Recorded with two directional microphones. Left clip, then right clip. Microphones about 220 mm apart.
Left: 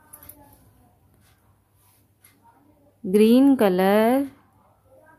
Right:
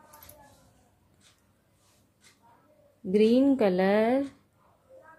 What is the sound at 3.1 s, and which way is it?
A woman's voice, 30° left (ahead or behind).